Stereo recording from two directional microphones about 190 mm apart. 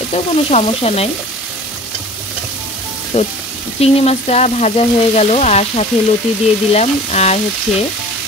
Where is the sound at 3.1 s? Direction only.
35° left (ahead or behind).